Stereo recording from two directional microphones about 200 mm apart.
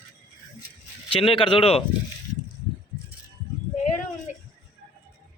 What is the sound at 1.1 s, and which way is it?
Speech, 25° left (ahead or behind).